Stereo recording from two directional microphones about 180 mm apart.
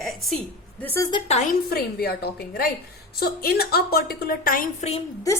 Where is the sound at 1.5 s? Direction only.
55° left (ahead or behind).